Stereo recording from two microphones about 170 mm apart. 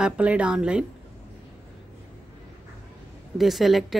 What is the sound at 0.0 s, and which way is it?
Speech, 5° right (ahead or behind).